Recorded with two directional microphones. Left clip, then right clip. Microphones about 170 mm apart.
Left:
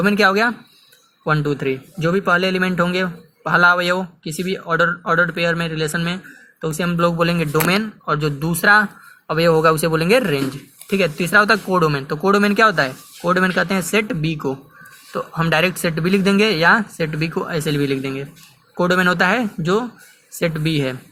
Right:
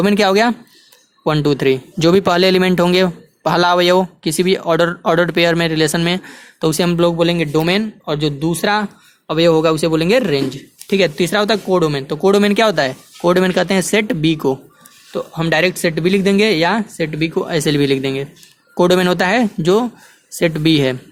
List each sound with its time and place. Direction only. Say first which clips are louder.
0.0 s speech: right 2 dB; 45° right (ahead or behind)
7.1 s speech: right 3 dB; 25° right (ahead or behind)
15.1 s speech: right 2 dB; 20° right (ahead or behind)
17.7 s speech: right 5 dB; 40° right (ahead or behind)